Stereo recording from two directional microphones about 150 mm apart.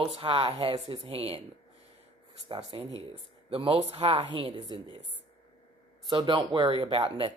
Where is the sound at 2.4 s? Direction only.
35° right (ahead or behind).